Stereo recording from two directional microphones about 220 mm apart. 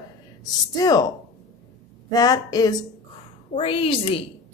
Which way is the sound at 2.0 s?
15° left (ahead or behind).